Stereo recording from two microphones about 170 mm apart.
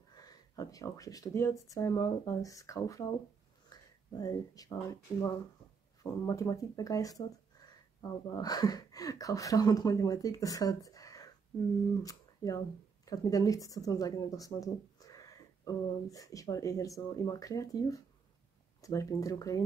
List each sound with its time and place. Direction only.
0.1 s speech: 20° left (ahead or behind)
3.7 s a sound: 25° left (ahead or behind)
4.2 s speech: 20° left (ahead or behind)